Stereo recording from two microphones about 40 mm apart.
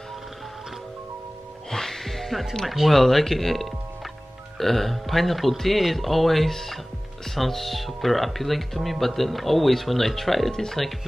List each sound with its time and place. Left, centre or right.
1.7 s music: centre
2.9 s speech: centre